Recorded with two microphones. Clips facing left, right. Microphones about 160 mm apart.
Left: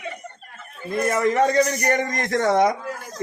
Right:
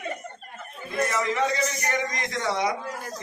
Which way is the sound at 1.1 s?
50° left (ahead or behind).